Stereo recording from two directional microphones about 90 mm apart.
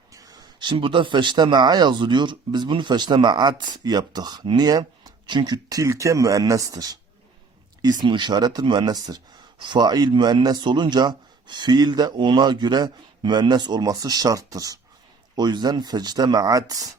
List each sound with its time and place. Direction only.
0.1 s speech: 45° right (ahead or behind)
5.7 s speech: 35° right (ahead or behind)
8.0 s speech: 60° right (ahead or behind); by 14.8 s 40° right (ahead or behind)
15.4 s speech: 50° right (ahead or behind)